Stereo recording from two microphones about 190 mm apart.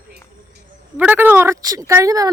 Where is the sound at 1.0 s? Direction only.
10° right (ahead or behind).